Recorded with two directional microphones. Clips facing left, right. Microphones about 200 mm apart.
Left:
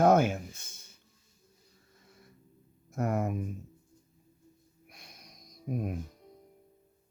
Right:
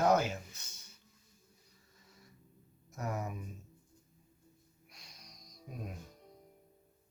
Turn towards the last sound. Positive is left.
turn(degrees=55)  # may be behind; listen again after turning